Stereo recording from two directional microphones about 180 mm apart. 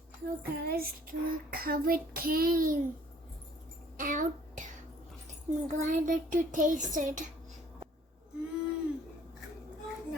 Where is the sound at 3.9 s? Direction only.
45° right (ahead or behind).